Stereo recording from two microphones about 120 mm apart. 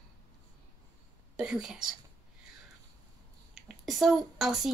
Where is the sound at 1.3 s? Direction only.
5° right (ahead or behind).